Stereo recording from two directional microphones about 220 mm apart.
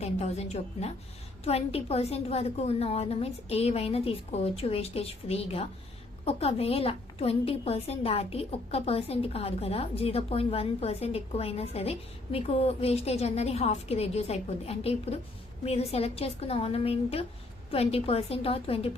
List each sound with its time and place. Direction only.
0.0 s a woman's voice: 30° left (ahead or behind)